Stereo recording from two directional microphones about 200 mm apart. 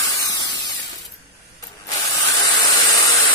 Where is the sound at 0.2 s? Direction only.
20° left (ahead or behind).